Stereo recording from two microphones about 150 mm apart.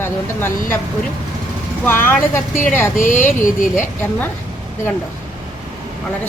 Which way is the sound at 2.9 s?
65° left (ahead or behind).